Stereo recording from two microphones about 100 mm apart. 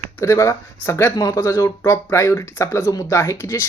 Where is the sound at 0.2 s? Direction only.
25° left (ahead or behind).